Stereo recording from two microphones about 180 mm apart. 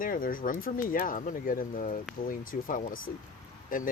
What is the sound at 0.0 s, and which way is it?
Speech, 50° left (ahead or behind).